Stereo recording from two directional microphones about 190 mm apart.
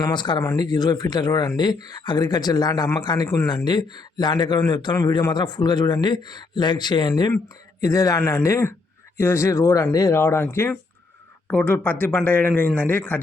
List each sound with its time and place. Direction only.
0.0 s speech: 25° left (ahead or behind)